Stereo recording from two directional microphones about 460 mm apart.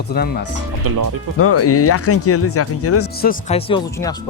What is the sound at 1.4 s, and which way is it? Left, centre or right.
Speech, left.